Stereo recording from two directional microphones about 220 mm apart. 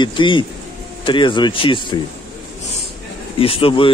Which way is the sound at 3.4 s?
25° left (ahead or behind).